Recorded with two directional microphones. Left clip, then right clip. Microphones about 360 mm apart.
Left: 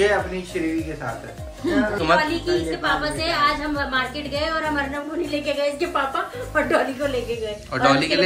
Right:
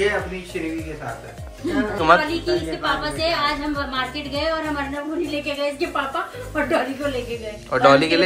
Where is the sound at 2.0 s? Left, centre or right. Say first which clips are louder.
Right 6 dB; centre.